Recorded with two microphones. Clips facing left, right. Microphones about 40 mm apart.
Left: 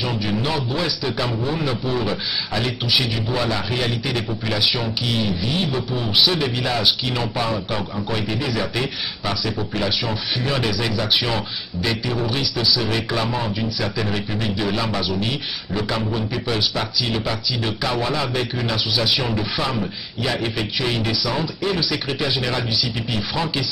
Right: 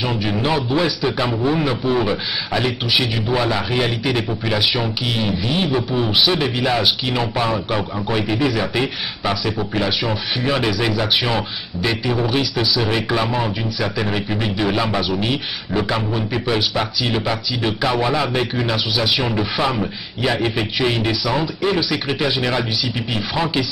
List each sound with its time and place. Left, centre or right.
0.0 s a man's voice: centre